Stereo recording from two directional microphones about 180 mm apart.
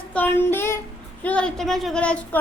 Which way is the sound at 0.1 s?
10° left (ahead or behind).